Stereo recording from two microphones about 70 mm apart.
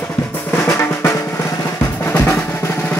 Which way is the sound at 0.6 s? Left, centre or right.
Left.